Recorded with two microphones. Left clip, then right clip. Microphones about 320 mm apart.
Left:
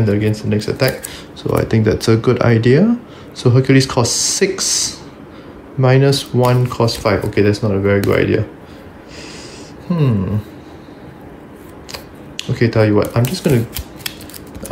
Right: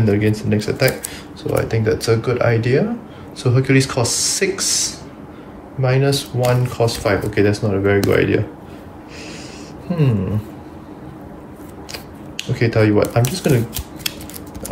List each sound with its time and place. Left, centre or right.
0.0 s speech: centre
9.8 s speech: centre
11.9 s a sound: centre
13.3 s speech: centre